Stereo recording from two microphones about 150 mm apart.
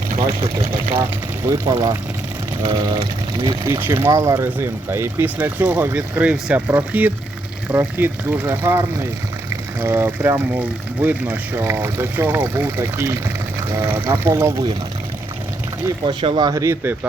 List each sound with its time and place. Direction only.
1.5 s speech: 25° right (ahead or behind)
9.8 s speech: 15° right (ahead or behind)
16.0 s speech: 35° right (ahead or behind); by 17.1 s 15° right (ahead or behind)